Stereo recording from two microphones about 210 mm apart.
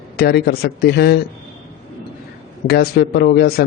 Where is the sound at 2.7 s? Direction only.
50° left (ahead or behind).